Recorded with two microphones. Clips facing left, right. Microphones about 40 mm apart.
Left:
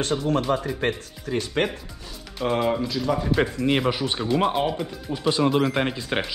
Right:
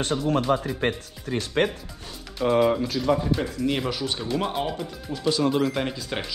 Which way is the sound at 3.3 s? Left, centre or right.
Left.